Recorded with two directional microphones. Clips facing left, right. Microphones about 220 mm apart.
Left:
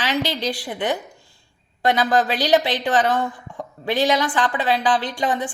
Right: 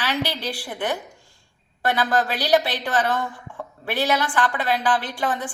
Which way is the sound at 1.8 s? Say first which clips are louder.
Left 3 dB; 20° left (ahead or behind).